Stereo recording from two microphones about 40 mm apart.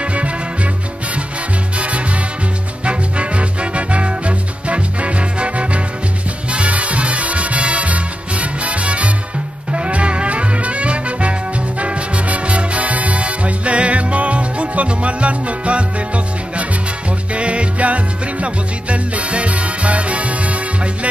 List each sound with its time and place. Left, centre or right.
0.0 s music: right
1.8 s music: right
17.3 s music: right